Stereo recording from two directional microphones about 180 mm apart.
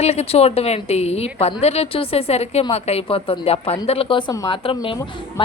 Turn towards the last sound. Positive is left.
turn(degrees=30)  # may be behind; listen again after turning